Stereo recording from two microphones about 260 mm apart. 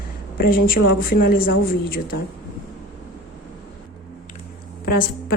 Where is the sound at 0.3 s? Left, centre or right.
Left.